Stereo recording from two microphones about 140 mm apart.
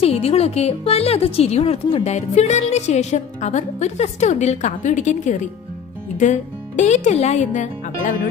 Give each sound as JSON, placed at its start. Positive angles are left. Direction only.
{"t": 0.0, "sound": "speech", "side_deg": 45}